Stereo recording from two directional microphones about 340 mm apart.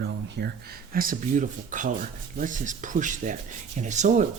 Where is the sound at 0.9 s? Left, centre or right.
Right.